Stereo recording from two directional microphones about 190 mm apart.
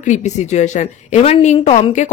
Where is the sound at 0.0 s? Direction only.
40° left (ahead or behind).